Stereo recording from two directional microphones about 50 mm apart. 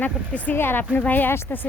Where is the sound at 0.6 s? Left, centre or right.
Left.